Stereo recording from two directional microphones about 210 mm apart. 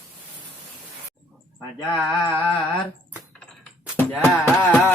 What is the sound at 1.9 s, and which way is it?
Mantra, 20° left (ahead or behind).